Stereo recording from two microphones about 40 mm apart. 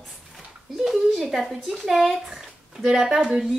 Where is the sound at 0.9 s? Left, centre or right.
Centre.